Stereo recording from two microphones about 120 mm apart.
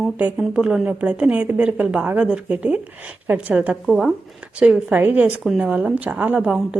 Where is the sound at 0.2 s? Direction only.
5° right (ahead or behind).